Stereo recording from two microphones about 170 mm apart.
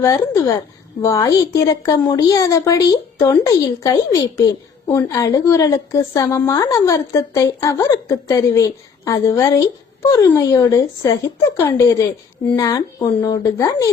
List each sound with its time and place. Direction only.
0.0 s a woman's voice: 20° left (ahead or behind)